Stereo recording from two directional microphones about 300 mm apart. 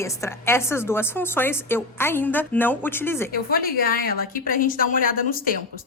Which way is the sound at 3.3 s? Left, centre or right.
Left.